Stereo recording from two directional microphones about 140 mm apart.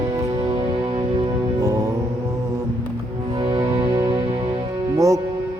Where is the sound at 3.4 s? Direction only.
30° right (ahead or behind).